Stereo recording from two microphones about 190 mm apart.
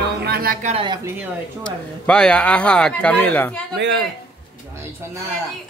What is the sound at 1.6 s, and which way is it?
Speech, 5° left (ahead or behind).